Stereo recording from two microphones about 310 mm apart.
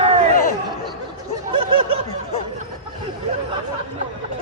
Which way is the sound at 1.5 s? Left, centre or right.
Centre.